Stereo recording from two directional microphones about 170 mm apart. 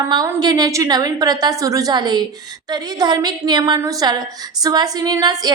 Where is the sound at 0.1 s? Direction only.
25° right (ahead or behind).